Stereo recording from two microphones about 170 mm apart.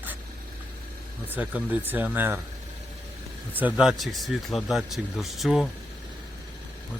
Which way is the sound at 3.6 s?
5° right (ahead or behind).